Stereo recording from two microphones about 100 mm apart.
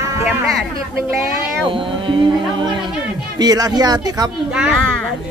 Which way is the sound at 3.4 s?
40° right (ahead or behind).